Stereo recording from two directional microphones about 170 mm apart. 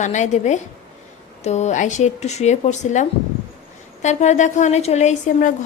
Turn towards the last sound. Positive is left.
turn(degrees=50)  # may be behind; listen again after turning